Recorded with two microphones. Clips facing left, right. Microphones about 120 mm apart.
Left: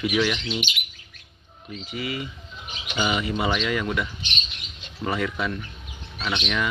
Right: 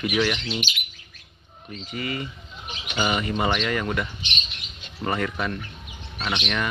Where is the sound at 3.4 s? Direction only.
Centre (ahead or behind).